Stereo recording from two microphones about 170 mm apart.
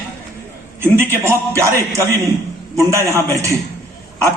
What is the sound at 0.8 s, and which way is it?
A man's voice, 15° right (ahead or behind).